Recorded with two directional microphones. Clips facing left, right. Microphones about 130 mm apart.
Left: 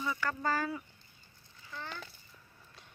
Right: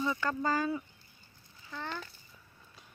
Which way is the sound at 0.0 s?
20° right (ahead or behind).